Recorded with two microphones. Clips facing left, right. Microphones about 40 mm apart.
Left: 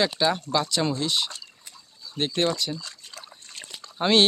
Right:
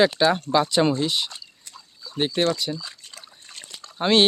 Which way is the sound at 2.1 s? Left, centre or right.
Centre.